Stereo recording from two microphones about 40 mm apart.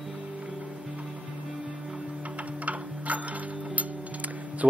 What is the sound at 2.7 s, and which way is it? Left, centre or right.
Tick-tock, right.